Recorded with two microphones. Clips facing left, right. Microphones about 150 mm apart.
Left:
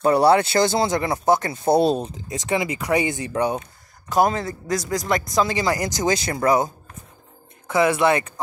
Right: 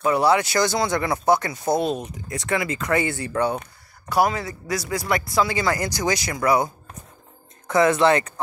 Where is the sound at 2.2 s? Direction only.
20° left (ahead or behind).